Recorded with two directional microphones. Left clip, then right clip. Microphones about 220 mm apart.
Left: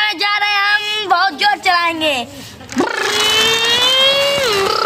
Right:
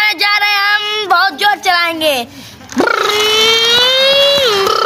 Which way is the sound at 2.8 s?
25° right (ahead or behind).